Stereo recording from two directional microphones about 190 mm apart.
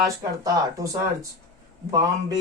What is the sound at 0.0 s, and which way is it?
Speech, 20° right (ahead or behind).